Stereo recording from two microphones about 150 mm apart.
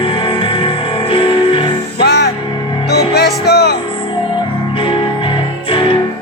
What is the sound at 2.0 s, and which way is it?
Music, 90° left.